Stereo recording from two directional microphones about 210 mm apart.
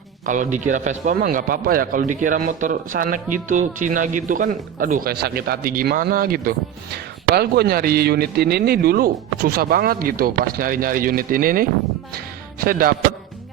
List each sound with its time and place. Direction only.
0.3 s a man's voice: 35° right (ahead or behind)